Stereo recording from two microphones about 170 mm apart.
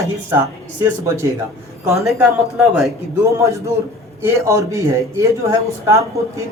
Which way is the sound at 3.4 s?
15° right (ahead or behind).